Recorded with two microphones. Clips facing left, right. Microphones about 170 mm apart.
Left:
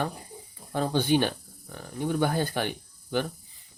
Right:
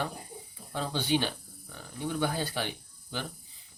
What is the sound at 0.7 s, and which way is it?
Speech, 50° left (ahead or behind).